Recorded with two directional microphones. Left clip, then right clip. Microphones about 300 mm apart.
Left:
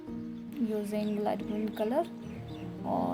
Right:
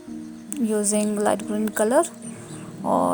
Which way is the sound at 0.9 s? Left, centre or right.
Right.